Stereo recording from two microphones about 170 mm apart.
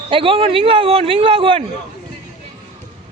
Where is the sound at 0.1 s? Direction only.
30° right (ahead or behind).